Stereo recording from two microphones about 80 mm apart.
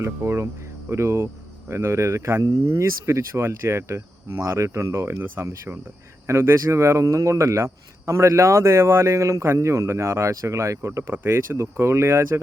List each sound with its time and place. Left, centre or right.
0.0 s cricket: right